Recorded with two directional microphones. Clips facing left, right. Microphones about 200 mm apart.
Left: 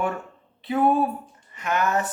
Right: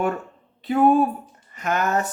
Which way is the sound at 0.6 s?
45° right (ahead or behind).